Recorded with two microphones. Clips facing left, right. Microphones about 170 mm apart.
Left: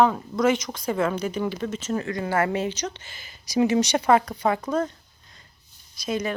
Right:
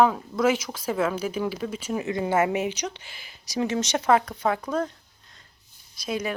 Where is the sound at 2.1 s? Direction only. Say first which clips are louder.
Right 3 dB; 20° right (ahead or behind); by 4.9 s 5° left (ahead or behind).